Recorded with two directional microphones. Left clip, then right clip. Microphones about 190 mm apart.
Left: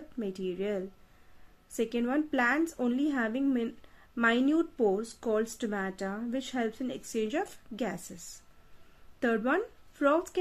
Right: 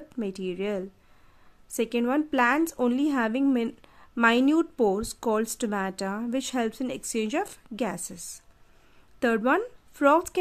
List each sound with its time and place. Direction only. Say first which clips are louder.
0.2 s speech: right 3 dB; 30° right (ahead or behind)